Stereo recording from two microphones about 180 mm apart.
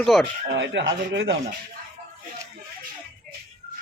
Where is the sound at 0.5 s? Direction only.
80° right.